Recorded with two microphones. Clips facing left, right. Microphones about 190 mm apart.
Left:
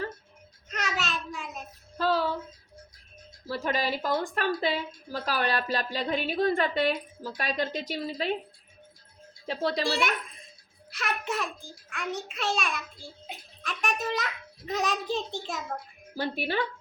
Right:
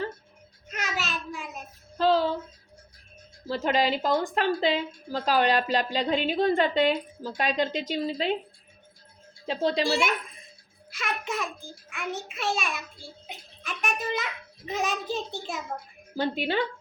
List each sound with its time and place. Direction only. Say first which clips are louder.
0.7 s a sound: even; centre (ahead or behind)
2.0 s female singing: right 4 dB; 25° right (ahead or behind)
3.4 s a woman's voice: right 4 dB; 20° right (ahead or behind)
9.5 s a woman's voice: right 3 dB; 20° right (ahead or behind)
10.9 s a child's voice: even; centre (ahead or behind)
16.1 s a woman's voice: right 3 dB; 20° right (ahead or behind)